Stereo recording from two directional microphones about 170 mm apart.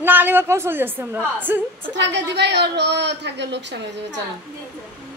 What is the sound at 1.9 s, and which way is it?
A woman's voice, 90° right.